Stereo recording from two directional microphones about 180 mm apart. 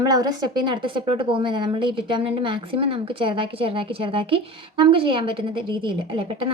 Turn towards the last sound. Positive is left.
turn(degrees=-30)  # may be behind; listen again after turning